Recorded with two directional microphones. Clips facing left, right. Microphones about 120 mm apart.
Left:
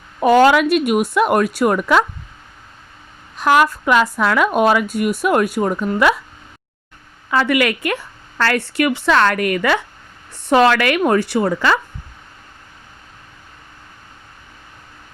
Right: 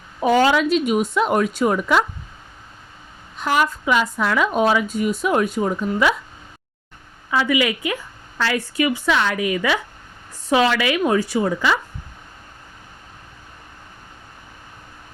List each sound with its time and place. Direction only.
0.2 s speech: 80° left
3.3 s speech: 80° left
7.3 s speech: 70° left (ahead or behind)